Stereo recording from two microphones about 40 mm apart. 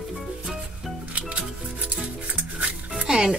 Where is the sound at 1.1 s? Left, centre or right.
Right.